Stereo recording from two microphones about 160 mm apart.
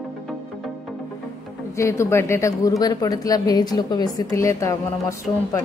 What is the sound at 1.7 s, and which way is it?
Speech, 20° left (ahead or behind).